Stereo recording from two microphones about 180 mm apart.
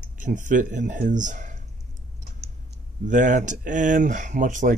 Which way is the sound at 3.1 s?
45° right (ahead or behind).